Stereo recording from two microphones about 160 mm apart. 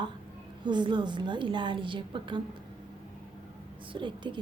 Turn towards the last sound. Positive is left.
turn(degrees=-30)  # may be behind; listen again after turning